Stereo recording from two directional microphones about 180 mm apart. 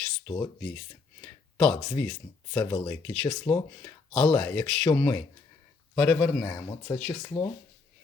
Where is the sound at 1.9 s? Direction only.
15° left (ahead or behind).